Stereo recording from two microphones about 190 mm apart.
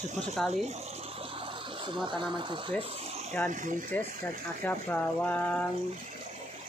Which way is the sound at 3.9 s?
10° left (ahead or behind).